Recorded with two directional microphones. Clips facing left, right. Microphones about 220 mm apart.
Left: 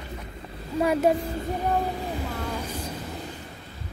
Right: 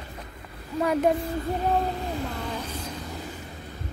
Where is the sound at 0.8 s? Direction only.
10° left (ahead or behind).